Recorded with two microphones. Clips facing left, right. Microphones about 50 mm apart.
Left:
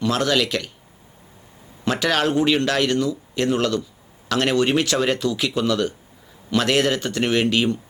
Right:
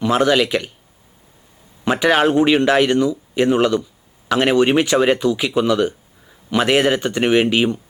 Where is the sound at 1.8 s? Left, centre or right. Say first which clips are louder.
Right 5 dB; right.